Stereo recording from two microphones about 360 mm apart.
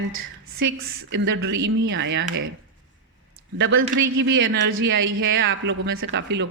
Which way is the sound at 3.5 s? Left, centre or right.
Right.